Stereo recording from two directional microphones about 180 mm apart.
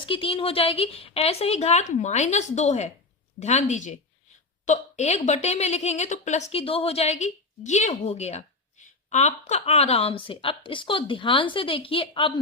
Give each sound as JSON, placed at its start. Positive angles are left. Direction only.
{"t": 0.0, "sound": "a woman's voice", "side_deg": 30}